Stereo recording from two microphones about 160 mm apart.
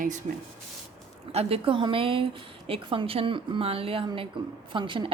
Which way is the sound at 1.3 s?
35° right (ahead or behind).